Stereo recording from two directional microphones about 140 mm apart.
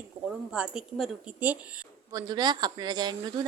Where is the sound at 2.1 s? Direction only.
25° right (ahead or behind).